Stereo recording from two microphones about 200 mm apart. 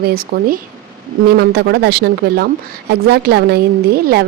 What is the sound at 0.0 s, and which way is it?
A woman's voice, 50° right (ahead or behind).